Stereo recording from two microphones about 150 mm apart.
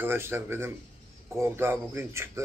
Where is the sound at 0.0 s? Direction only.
15° right (ahead or behind).